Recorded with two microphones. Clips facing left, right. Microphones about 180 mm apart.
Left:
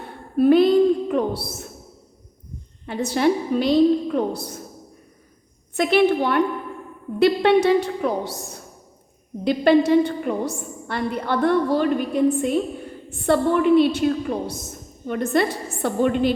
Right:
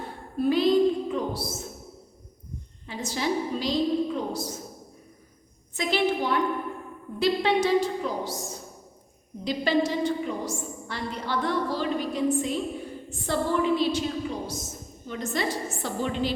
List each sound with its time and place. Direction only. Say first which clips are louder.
0.3 s a sound: left 7 dB; 60° left (ahead or behind)
2.8 s a woman's voice: left 9 dB; 60° left (ahead or behind)
5.7 s a woman's voice: left 8 dB; 60° left (ahead or behind)